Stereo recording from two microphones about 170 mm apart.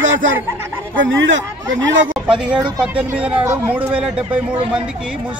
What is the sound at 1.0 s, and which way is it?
Speech, 90° right.